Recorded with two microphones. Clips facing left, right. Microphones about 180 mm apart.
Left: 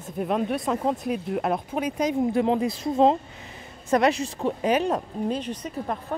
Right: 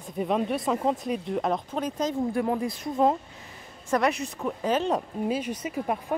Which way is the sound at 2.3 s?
25° left (ahead or behind).